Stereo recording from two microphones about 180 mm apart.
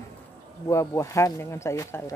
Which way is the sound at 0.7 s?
15° left (ahead or behind).